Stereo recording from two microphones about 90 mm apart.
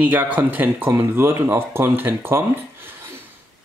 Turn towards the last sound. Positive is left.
turn(degrees=-25)  # may be behind; listen again after turning